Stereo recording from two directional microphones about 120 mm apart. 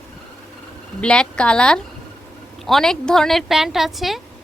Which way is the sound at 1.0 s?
10° left (ahead or behind).